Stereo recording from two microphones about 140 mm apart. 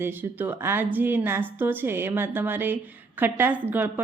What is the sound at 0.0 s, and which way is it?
A woman's voice, 15° right (ahead or behind).